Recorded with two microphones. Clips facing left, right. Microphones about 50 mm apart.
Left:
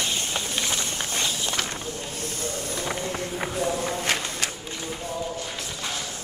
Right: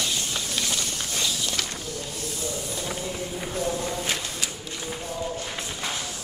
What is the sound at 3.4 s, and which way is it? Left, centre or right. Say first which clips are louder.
Run: left 2 dB; left.